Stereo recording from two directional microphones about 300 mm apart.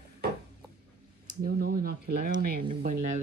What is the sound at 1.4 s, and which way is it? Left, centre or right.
Speech, right.